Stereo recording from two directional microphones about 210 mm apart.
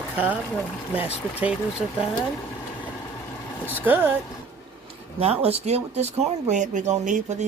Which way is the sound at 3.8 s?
10° right (ahead or behind).